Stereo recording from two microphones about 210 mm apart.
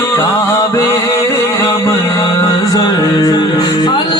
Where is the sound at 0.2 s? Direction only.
10° left (ahead or behind).